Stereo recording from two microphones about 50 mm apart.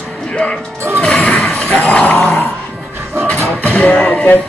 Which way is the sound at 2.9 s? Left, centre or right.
Right.